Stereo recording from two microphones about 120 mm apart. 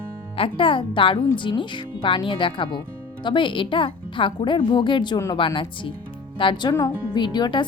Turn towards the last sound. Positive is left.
turn(degrees=40)  # may be behind; listen again after turning